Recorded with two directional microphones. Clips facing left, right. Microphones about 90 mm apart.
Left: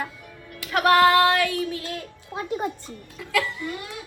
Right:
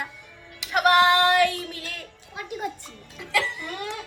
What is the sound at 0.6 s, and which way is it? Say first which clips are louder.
Music: left 1 dB; 15° right (ahead or behind).